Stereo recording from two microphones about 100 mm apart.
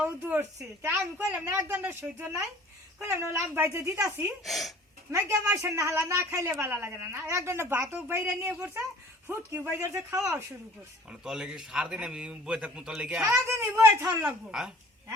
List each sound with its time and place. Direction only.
0.0 s a woman's voice: 20° right (ahead or behind)
4.4 s speech: centre (ahead or behind)
5.1 s a woman's voice: 30° right (ahead or behind)
11.1 s a man's voice: 5° right (ahead or behind)
13.3 s a woman's voice: 25° right (ahead or behind)
14.5 s speech: 5° right (ahead or behind)